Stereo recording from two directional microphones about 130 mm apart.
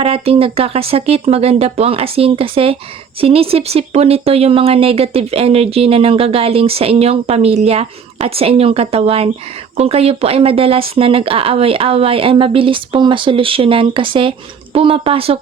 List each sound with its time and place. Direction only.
0.0 s speech: 45° right (ahead or behind)